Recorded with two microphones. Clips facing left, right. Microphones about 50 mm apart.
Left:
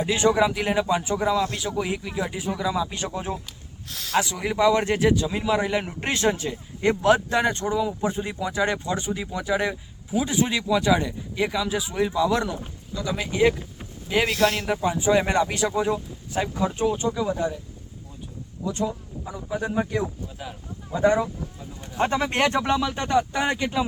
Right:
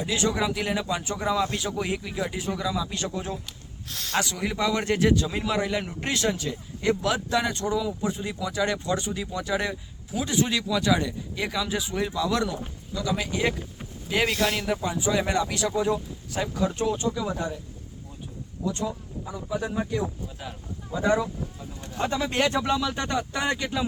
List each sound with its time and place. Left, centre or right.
0.0 s speech: left
0.3 s speech: centre
3.8 s speech: centre
5.6 s speech: left
13.1 s speech: centre
14.7 s speech: centre
15.7 s speech: centre
18.6 s speech: centre
22.0 s speech: left
22.9 s speech: centre